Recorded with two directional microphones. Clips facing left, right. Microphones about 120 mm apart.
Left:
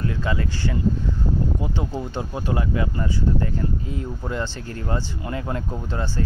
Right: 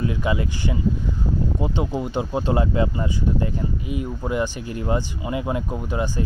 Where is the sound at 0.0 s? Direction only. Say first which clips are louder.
Right 2 dB; 15° right (ahead or behind).